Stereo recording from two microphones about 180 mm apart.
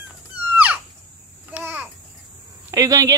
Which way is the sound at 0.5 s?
10° right (ahead or behind).